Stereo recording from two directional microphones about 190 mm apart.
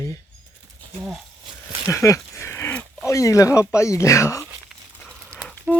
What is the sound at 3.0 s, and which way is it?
Speech, 15° left (ahead or behind).